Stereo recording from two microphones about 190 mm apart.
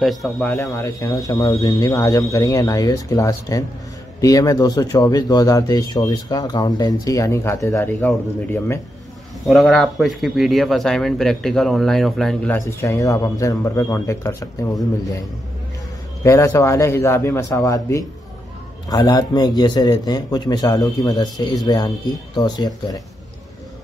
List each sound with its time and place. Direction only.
0.0 s a man's voice: centre (ahead or behind)
9.5 s speech: centre (ahead or behind)
12.5 s speech: 15° left (ahead or behind)
16.3 s a man's voice: 15° left (ahead or behind)